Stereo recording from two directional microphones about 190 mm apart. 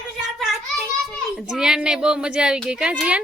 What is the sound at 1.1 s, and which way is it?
A woman's voice, centre (ahead or behind).